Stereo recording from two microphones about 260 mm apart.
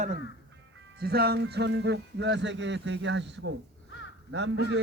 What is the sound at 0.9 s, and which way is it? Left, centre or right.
Speech, right.